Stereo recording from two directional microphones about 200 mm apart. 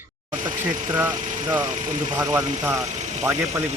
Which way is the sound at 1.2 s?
40° right (ahead or behind).